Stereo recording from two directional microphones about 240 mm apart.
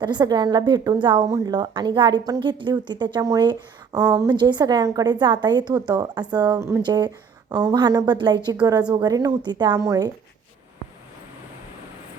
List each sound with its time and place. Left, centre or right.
0.0 s a woman's voice: centre